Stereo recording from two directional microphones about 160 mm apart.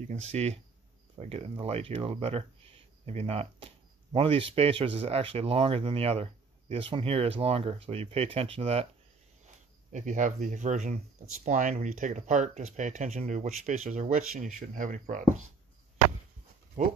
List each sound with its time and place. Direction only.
0.1 s speech: 40° right (ahead or behind)
9.9 s speech: 50° right (ahead or behind)